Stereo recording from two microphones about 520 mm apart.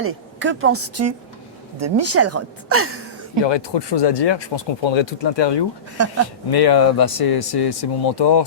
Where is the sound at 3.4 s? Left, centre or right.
Left.